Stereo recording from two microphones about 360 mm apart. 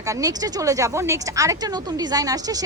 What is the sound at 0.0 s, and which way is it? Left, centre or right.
A woman's voice, centre.